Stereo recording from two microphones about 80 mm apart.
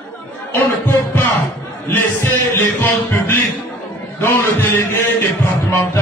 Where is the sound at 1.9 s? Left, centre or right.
Left.